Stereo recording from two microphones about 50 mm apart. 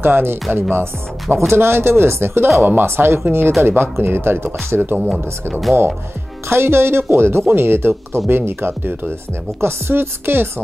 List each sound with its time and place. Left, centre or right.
0.0 s speech: right
1.5 s speech: right
5.5 s speech: centre
6.5 s speech: right